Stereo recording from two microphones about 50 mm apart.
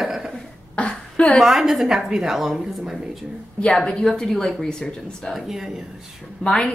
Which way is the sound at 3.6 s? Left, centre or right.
Centre.